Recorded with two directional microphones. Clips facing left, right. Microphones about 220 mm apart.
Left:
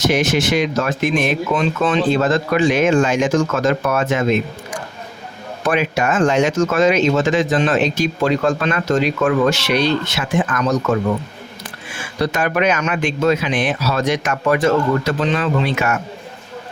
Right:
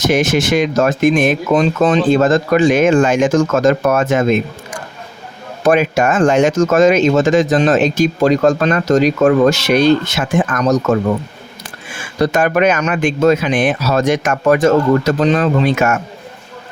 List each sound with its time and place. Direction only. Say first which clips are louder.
0.0 s speech: right 3 dB; 50° right (ahead or behind)
5.6 s speech: right 5 dB; 45° right (ahead or behind)
12.2 s speech: right 5 dB; 45° right (ahead or behind)